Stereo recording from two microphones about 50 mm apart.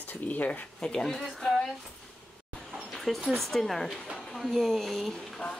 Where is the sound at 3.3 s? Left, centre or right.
Centre.